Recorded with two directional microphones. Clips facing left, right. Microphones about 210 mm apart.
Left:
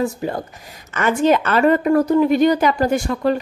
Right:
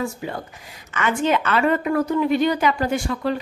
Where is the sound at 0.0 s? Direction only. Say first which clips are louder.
Left 5 dB; 40° left (ahead or behind).